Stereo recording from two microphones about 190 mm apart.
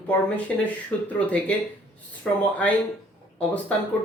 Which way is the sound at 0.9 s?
5° left (ahead or behind).